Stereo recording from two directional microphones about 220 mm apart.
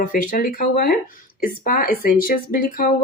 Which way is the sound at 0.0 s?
40° left (ahead or behind).